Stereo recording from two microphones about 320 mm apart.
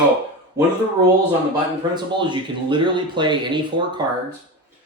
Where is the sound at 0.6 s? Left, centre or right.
Centre.